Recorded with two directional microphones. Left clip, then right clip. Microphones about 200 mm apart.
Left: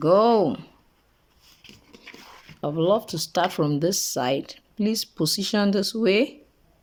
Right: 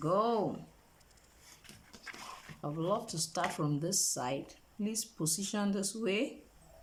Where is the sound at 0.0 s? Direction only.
50° left (ahead or behind).